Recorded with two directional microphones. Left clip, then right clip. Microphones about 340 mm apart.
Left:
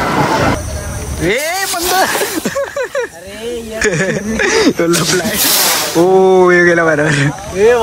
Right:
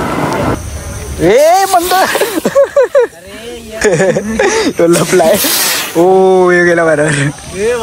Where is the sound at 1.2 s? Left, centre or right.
Centre.